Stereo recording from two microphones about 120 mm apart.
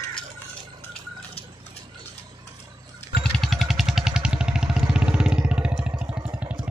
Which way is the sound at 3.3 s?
Centre (ahead or behind).